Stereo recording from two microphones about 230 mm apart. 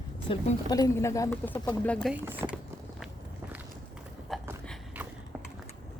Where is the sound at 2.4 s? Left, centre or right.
Centre.